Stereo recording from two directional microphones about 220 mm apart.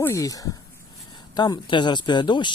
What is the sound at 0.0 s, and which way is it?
Speech, 15° left (ahead or behind).